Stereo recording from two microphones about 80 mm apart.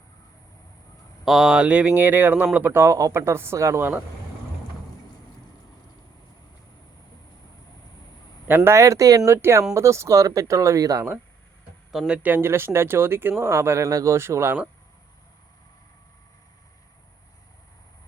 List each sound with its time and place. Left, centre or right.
1.2 s speech: centre; by 3.8 s right
8.4 s speech: right
9.3 s speech: right
12.0 s speech: centre
12.3 s speech: right